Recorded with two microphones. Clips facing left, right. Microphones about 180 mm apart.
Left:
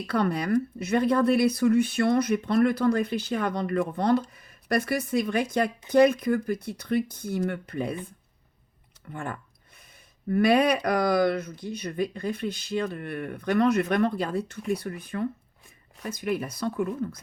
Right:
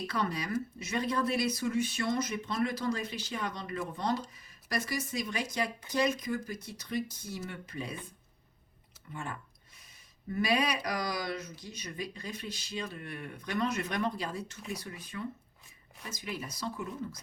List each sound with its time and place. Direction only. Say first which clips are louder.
0.1 s speech: left 11 dB; 55° left (ahead or behind)
9.1 s a sound: left 6 dB; 55° left (ahead or behind)
10.2 s speech: left 9 dB; 60° left (ahead or behind)